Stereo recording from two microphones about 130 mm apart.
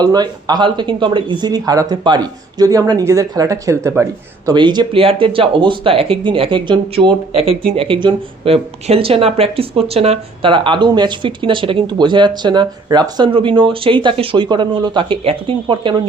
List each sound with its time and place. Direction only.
0.0 s speech: 30° right (ahead or behind)
4.5 s speech: 35° right (ahead or behind)